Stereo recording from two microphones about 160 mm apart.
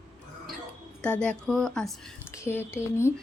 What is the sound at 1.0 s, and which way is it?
Speech, 5° left (ahead or behind).